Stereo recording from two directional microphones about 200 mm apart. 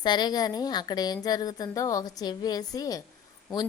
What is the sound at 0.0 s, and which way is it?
A woman's voice, 20° left (ahead or behind).